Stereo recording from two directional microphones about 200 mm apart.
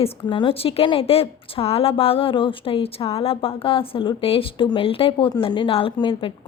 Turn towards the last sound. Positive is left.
turn(degrees=25)  # may be behind; listen again after turning